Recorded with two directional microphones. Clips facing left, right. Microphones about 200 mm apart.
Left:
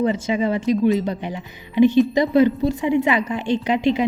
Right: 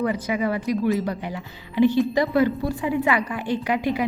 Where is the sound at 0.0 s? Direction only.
25° left (ahead or behind).